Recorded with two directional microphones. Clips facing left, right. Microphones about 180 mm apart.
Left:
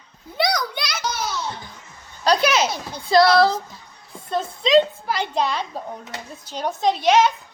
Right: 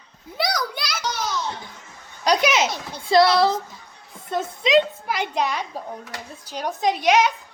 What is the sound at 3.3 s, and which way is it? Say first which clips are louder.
Speech: left 2 dB; 25° right (ahead or behind).